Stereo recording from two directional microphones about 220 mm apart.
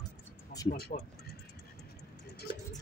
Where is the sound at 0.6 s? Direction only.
45° left (ahead or behind).